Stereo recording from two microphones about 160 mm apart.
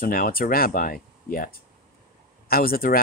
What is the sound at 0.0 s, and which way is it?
Speech, 65° left (ahead or behind).